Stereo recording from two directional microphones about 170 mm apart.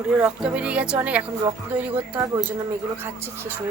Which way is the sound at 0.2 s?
5° right (ahead or behind).